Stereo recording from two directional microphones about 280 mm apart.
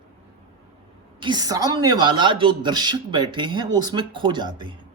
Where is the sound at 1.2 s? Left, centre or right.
Centre.